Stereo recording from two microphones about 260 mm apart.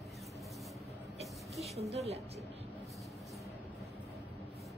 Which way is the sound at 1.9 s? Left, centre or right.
Right.